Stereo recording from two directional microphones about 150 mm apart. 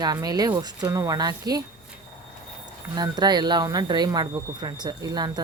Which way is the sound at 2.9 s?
25° right (ahead or behind).